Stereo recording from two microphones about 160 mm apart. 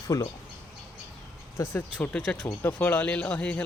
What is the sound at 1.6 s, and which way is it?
Speech, 10° left (ahead or behind).